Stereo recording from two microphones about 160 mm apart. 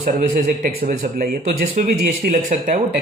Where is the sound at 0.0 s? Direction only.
55° right (ahead or behind).